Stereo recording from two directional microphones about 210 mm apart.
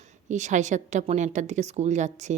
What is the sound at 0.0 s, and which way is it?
Speech, 35° right (ahead or behind).